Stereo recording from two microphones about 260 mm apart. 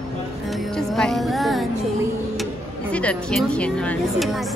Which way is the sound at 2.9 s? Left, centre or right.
Centre.